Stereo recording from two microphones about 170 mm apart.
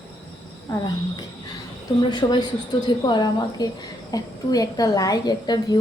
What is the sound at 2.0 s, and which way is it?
A woman's voice, 25° left (ahead or behind).